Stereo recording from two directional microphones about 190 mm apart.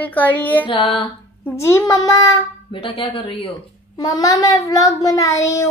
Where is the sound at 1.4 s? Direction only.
15° left (ahead or behind).